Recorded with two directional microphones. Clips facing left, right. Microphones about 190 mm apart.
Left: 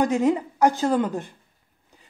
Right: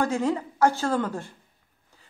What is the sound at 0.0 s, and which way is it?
A woman's voice, 20° left (ahead or behind).